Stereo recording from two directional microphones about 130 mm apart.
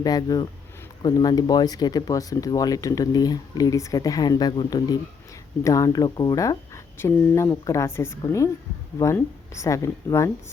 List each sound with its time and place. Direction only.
0.0 s speech: 30° left (ahead or behind)